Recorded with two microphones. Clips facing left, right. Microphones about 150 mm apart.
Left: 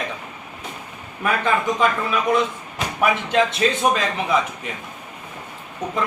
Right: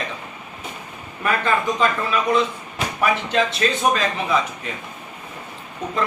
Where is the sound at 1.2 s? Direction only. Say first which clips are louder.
Even; 15° left (ahead or behind).